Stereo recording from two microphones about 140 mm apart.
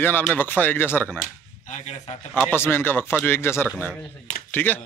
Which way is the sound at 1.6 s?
55° left (ahead or behind).